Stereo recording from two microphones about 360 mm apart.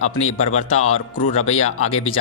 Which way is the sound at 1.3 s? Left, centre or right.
Centre.